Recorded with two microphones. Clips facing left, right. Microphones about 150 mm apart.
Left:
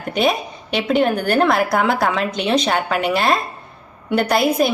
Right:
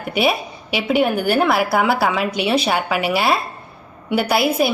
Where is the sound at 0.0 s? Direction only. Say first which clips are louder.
Even; 5° right (ahead or behind).